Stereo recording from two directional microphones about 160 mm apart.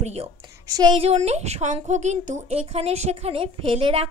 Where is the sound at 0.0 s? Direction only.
40° right (ahead or behind).